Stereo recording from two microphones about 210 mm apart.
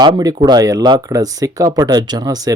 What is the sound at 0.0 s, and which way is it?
Speech, 20° right (ahead or behind).